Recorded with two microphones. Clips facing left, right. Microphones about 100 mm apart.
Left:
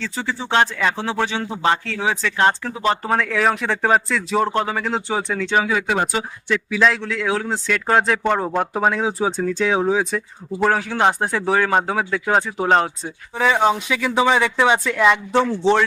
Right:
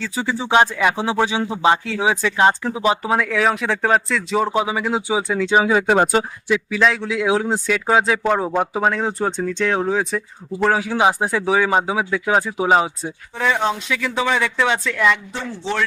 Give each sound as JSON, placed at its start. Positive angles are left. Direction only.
{"t": 0.0, "sound": "speech", "side_deg": -10}
{"t": 5.6, "sound": "speech", "side_deg": -30}
{"t": 6.5, "sound": "speech", "side_deg": 0}
{"t": 7.0, "sound": "speech", "side_deg": -10}
{"t": 7.7, "sound": "speech", "side_deg": -5}
{"t": 13.4, "sound": "speech", "side_deg": 10}